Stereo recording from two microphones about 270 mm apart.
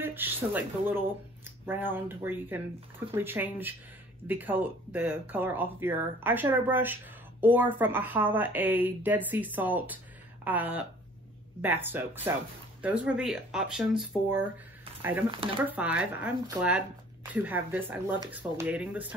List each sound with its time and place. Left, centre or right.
0.0 s speech: centre
15.3 s speech: centre
15.7 s speech: centre